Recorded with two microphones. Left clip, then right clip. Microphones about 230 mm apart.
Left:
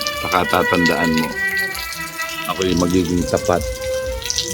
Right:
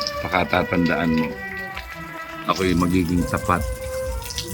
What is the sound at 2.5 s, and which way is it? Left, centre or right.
Speech, centre.